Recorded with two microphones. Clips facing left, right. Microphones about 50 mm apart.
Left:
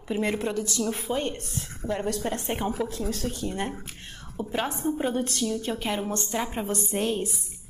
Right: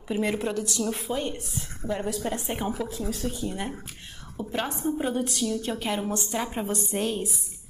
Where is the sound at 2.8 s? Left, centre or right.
Left.